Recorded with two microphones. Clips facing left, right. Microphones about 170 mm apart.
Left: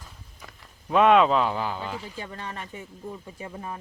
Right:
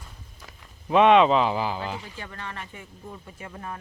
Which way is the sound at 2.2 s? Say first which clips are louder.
Left 2 dB; 20° left (ahead or behind).